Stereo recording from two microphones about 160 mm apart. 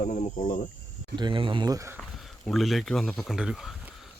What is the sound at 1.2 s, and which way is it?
Speech, 30° right (ahead or behind).